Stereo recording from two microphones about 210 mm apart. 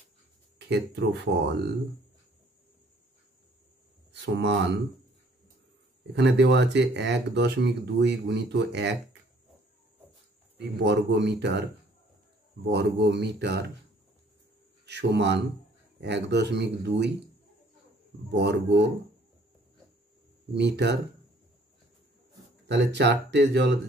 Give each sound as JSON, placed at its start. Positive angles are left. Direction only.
{"t": 0.6, "sound": "speech", "side_deg": -55}
{"t": 4.1, "sound": "speech", "side_deg": -55}
{"t": 6.1, "sound": "speech", "side_deg": -55}
{"t": 10.8, "sound": "speech", "side_deg": -55}
{"t": 12.6, "sound": "speech", "side_deg": -55}
{"t": 14.9, "sound": "speech", "side_deg": -55}
{"t": 18.3, "sound": "speech", "side_deg": -55}
{"t": 20.5, "sound": "speech", "side_deg": -55}
{"t": 22.7, "sound": "speech", "side_deg": -55}